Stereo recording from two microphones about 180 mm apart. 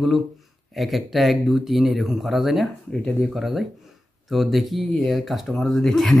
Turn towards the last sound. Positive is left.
turn(degrees=0)  # may be behind; listen again after turning